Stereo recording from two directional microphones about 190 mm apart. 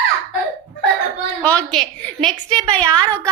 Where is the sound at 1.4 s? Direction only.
5° left (ahead or behind).